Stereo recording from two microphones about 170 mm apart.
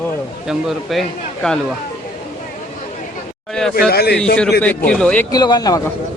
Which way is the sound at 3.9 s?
70° left (ahead or behind).